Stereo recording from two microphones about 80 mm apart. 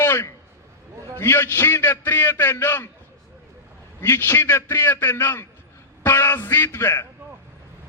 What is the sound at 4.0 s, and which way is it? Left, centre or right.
A man's voice, left.